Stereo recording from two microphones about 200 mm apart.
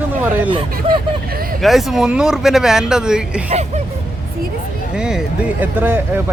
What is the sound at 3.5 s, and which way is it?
Speech, 35° right (ahead or behind).